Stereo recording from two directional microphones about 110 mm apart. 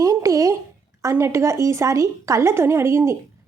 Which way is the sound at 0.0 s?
30° right (ahead or behind).